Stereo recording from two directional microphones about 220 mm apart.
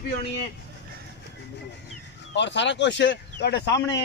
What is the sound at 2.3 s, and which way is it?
Speech, 55° left (ahead or behind).